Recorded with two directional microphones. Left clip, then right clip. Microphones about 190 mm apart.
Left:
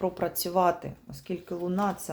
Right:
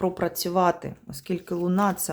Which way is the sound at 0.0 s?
25° right (ahead or behind).